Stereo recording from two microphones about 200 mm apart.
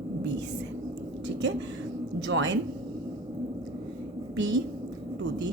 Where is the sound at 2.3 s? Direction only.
65° right (ahead or behind).